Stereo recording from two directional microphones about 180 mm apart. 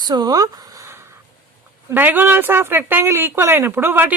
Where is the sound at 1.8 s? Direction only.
10° right (ahead or behind).